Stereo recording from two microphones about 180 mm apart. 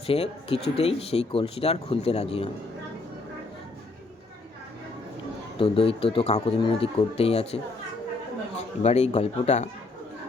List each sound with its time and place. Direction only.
0.1 s speech: 30° left (ahead or behind)
5.5 s speech: 30° left (ahead or behind)
8.8 s speech: 35° left (ahead or behind)